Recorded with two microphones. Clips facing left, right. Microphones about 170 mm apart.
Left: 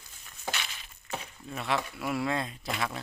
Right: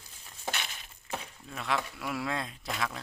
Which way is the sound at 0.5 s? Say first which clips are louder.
Even; 50° right (ahead or behind).